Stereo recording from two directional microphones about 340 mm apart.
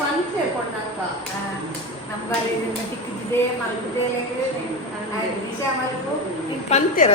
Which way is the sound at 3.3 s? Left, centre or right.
Centre.